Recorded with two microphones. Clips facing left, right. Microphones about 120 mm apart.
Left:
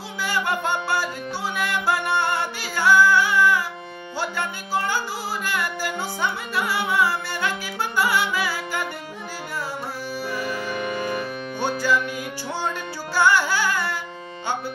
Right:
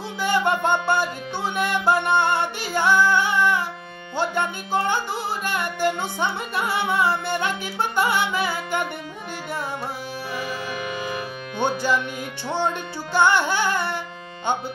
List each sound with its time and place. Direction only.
0.2 s music: 20° right (ahead or behind)
11.6 s music: 20° right (ahead or behind)
13.1 s music: 20° right (ahead or behind)